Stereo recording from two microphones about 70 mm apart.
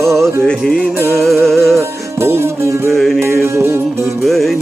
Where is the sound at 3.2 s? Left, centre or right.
Right.